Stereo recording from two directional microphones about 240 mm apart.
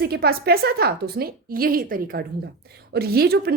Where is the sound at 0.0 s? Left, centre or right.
Right.